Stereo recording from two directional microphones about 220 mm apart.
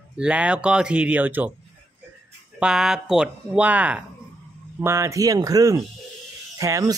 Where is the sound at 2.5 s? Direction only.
5° right (ahead or behind).